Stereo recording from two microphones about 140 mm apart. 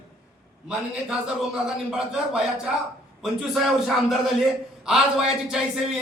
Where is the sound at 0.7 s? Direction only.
5° right (ahead or behind).